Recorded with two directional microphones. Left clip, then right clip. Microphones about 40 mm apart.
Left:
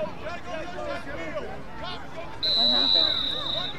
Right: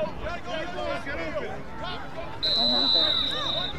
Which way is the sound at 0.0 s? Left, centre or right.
Centre.